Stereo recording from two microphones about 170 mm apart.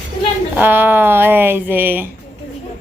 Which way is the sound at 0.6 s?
10° right (ahead or behind).